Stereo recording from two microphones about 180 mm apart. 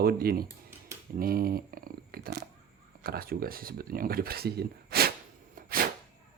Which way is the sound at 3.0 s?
55° right (ahead or behind).